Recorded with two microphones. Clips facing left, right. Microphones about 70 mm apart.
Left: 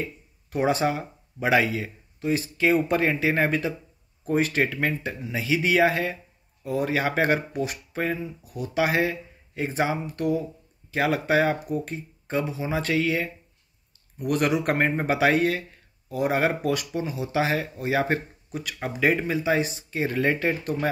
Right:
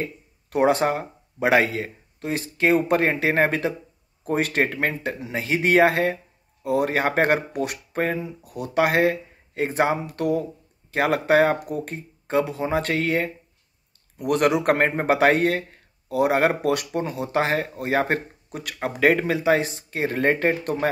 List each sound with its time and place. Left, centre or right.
0.5 s speech: right
10.9 s speech: right